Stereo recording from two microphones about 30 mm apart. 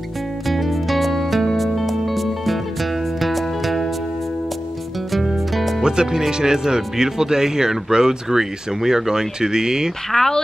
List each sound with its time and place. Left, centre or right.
0.5 s music: centre
5.1 s music: centre
5.8 s speech: right
10.1 s speech: centre